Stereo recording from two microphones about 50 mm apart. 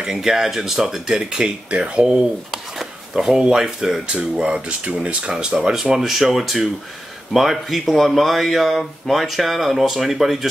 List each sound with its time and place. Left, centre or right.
0.0 s speech: centre
2.5 s a sound: centre
3.5 s speech: centre